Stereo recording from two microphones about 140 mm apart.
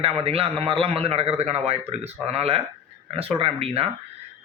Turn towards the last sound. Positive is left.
turn(degrees=-45)  # may be behind; listen again after turning